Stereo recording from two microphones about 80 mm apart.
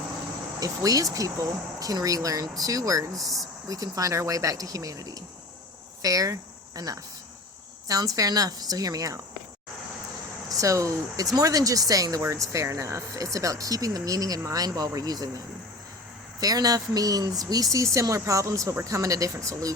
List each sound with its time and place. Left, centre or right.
0.6 s speech: right
3.2 s speech: centre
3.7 s speech: right
10.5 s speech: right
16.4 s speech: right